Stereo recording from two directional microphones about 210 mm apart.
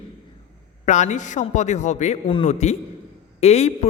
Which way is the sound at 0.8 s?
35° left (ahead or behind).